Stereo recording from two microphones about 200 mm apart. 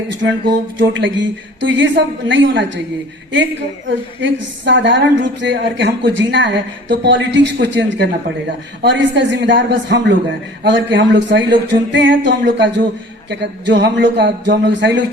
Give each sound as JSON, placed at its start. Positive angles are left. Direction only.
{"t": 0.8, "sound": "a woman's voice", "side_deg": -65}
{"t": 3.8, "sound": "a woman's voice", "side_deg": -65}